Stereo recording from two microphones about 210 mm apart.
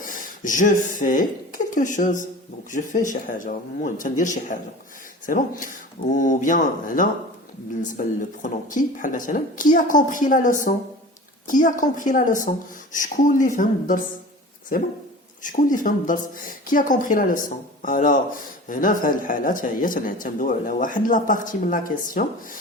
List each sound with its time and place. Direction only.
0.0 s a woman's voice: 40° left (ahead or behind)
15.4 s speech: 40° left (ahead or behind)